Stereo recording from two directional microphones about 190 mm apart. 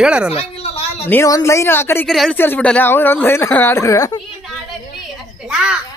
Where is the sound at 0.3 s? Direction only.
30° left (ahead or behind).